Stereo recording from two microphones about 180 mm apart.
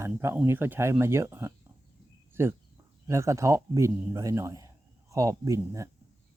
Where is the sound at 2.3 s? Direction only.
15° right (ahead or behind).